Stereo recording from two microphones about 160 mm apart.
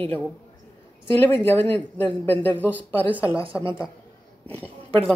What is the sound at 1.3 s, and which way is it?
Speech, 15° left (ahead or behind).